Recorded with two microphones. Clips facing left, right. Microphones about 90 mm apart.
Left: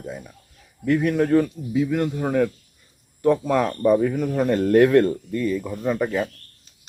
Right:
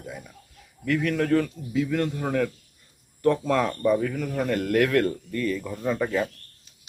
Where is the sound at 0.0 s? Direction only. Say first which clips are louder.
Left 4 dB; 25° left (ahead or behind).